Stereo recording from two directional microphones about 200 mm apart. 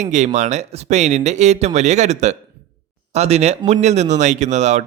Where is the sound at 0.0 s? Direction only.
35° right (ahead or behind).